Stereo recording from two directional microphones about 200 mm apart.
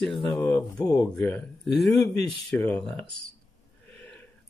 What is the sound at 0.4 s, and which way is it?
Speech, 5° left (ahead or behind).